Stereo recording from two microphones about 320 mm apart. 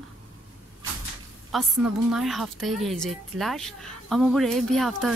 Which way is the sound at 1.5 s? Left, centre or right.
Centre.